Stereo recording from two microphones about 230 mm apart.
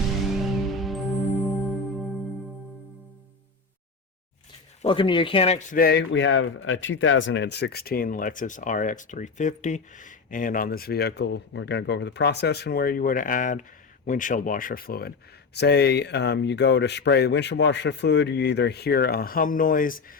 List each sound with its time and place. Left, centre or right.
0.3 s music: centre
4.8 s speech: left